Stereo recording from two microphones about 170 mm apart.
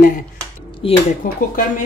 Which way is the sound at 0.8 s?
30° left (ahead or behind).